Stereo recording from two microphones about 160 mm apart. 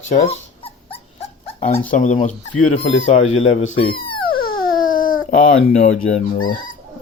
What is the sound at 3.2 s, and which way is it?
Speech, 45° left (ahead or behind).